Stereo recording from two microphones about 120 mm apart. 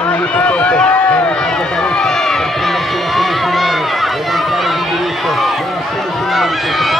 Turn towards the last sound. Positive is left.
turn(degrees=0)  # may be behind; listen again after turning